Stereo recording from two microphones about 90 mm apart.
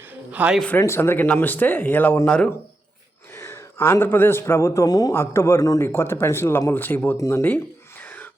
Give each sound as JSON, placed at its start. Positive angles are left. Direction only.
{"t": 0.0, "sound": "a sound", "side_deg": -15}
{"t": 0.8, "sound": "speech", "side_deg": 30}
{"t": 2.2, "sound": "speech", "side_deg": 10}
{"t": 3.3, "sound": "a man's voice", "side_deg": 30}
{"t": 5.1, "sound": "speech", "side_deg": 30}
{"t": 7.2, "sound": "speech", "side_deg": 35}
{"t": 7.4, "sound": "a sound", "side_deg": 20}